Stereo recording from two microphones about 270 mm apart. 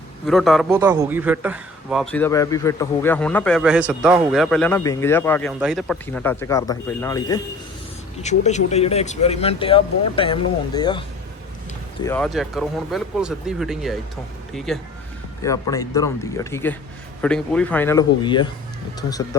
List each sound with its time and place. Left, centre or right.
0.3 s a man's voice: centre
8.2 s speech: left
12.0 s a man's voice: centre
15.4 s a man's voice: centre